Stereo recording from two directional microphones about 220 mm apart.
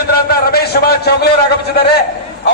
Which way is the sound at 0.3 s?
45° left (ahead or behind).